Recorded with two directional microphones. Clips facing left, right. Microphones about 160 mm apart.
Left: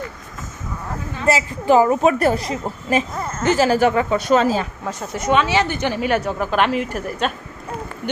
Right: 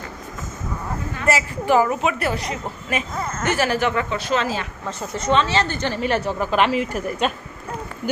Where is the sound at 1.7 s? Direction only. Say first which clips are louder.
Left 4 dB; 30° left (ahead or behind).